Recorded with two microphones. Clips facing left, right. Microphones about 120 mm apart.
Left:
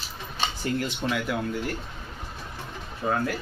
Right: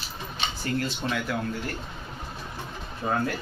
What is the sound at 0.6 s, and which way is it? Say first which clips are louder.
Speech: even; 15° left (ahead or behind).